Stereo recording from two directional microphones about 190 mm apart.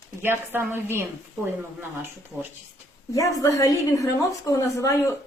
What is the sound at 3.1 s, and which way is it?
A woman's voice, 20° left (ahead or behind).